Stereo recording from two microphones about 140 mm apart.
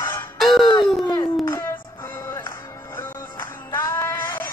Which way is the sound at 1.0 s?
20° left (ahead or behind).